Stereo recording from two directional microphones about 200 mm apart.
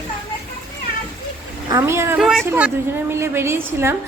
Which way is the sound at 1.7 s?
15° right (ahead or behind).